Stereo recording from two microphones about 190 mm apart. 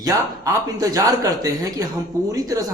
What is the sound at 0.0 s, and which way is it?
Speech, 20° right (ahead or behind).